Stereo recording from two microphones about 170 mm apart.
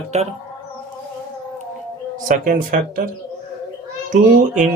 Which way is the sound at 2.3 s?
55° right (ahead or behind).